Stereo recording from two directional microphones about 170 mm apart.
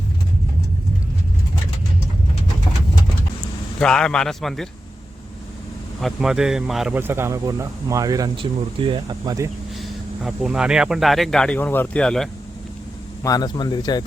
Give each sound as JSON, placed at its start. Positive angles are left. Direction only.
{"t": 3.8, "sound": "speech", "side_deg": 5}
{"t": 6.0, "sound": "speech", "side_deg": 0}
{"t": 9.7, "sound": "speech", "side_deg": 0}
{"t": 13.2, "sound": "speech", "side_deg": 20}